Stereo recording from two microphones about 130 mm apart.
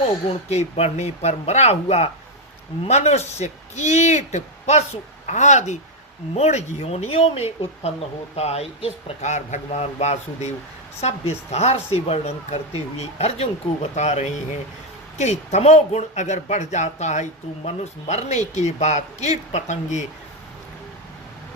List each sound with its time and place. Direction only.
0.0 s speech: 55° left (ahead or behind)